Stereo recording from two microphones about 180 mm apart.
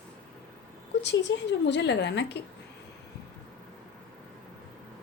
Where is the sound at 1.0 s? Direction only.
80° left.